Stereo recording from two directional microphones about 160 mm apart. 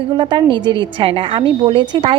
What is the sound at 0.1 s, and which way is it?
A woman's voice, 30° right (ahead or behind).